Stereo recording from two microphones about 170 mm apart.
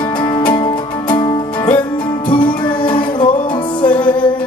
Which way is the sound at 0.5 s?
25° left (ahead or behind).